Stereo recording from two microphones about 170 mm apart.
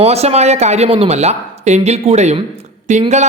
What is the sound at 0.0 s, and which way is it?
A man's voice, 40° right (ahead or behind).